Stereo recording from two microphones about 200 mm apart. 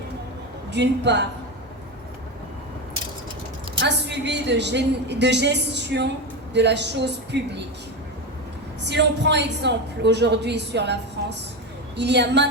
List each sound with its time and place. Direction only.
0.7 s a woman's voice: 60° right (ahead or behind)
3.8 s a woman's voice: 60° right (ahead or behind)
8.8 s a woman's voice: 60° right (ahead or behind)